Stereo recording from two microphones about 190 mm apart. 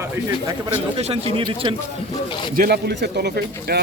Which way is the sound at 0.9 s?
30° right (ahead or behind).